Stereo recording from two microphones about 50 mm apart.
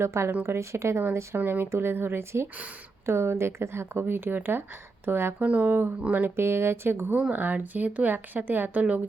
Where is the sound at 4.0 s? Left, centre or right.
Right.